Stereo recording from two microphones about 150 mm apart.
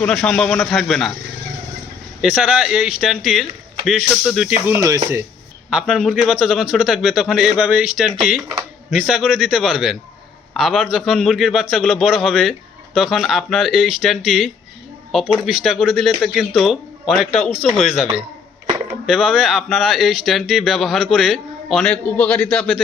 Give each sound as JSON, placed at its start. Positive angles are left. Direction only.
{"t": 0.0, "sound": "a man's voice", "side_deg": 5}
{"t": 2.3, "sound": "a man's voice", "side_deg": -5}
{"t": 4.4, "sound": "speech", "side_deg": -10}
{"t": 5.8, "sound": "a man's voice", "side_deg": 5}